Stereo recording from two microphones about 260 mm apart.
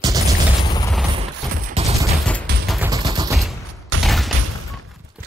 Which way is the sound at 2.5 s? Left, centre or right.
Right.